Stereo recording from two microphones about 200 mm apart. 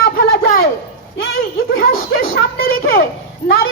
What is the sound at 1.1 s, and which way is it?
Clip-clop, 85° left.